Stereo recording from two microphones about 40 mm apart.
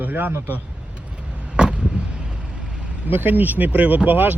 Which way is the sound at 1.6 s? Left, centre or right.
Right.